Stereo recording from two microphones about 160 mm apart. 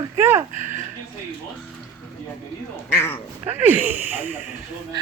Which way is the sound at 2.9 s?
15° left (ahead or behind).